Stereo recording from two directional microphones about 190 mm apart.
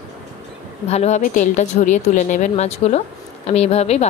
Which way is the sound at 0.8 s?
35° left (ahead or behind).